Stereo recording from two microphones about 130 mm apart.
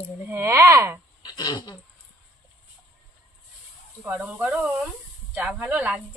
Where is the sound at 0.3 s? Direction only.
20° right (ahead or behind).